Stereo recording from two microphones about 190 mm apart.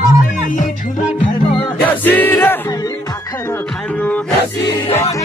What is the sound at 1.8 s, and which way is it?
Music, 10° left (ahead or behind).